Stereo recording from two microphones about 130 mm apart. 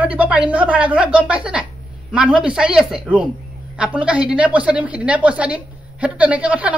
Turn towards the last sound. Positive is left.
turn(degrees=-10)  # may be behind; listen again after turning